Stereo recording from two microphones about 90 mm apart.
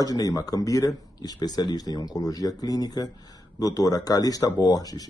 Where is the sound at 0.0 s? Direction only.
40° left (ahead or behind).